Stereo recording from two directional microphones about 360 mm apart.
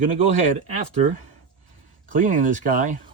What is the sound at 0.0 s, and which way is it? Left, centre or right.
Speech, centre.